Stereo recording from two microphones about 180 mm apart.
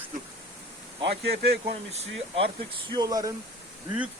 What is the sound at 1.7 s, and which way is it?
Speech, 35° right (ahead or behind).